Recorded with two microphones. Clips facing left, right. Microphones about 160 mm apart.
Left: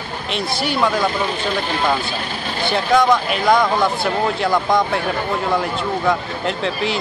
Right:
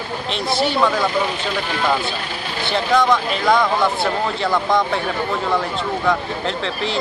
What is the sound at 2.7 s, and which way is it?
Speech, 5° left (ahead or behind).